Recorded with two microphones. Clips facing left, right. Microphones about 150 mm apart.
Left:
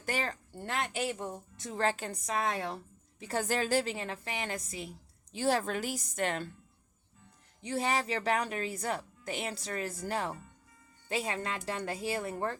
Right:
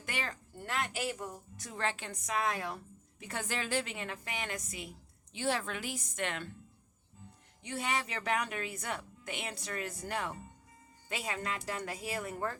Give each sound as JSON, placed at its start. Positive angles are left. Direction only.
{"t": 0.0, "sound": "a woman's voice", "side_deg": 35}
{"t": 7.6, "sound": "a woman's voice", "side_deg": 30}